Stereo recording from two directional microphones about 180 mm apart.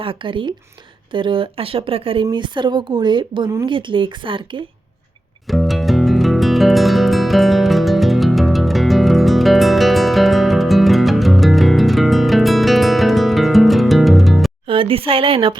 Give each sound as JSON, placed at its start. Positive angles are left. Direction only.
{"t": 0.0, "sound": "speech", "side_deg": -30}
{"t": 5.5, "sound": "music", "side_deg": 0}
{"t": 14.7, "sound": "speech", "side_deg": -30}